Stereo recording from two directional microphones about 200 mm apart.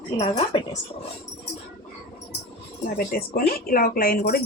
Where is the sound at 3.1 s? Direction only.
45° left (ahead or behind).